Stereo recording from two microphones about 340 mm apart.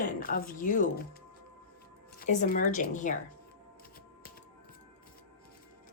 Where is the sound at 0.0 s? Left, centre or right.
Left.